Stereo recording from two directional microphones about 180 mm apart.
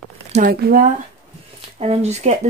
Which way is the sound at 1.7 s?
35° right (ahead or behind).